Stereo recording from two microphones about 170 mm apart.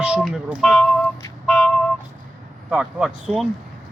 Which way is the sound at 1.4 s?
5° left (ahead or behind).